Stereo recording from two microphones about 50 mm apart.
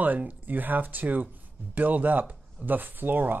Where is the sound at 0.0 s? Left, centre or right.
Right.